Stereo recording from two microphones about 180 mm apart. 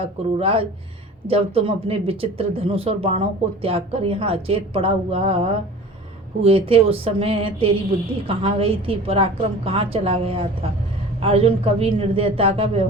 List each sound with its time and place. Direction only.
0.3 s speech: 35° right (ahead or behind)